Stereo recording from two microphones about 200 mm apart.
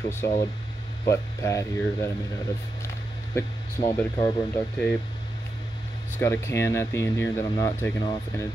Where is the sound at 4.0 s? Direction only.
15° left (ahead or behind).